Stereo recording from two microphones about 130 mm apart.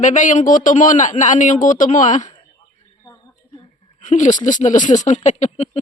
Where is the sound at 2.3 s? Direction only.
35° left (ahead or behind).